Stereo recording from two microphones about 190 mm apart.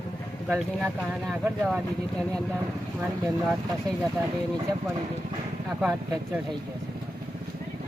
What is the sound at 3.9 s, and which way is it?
Speech, 20° right (ahead or behind).